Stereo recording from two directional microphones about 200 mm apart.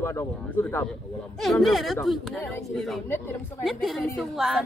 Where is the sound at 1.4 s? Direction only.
Centre (ahead or behind).